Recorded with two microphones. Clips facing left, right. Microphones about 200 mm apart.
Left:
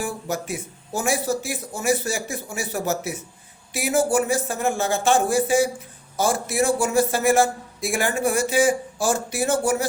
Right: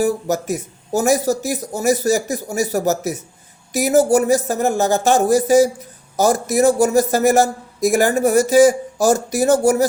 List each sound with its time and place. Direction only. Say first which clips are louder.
0.0 s speech: right 9 dB; 40° right (ahead or behind)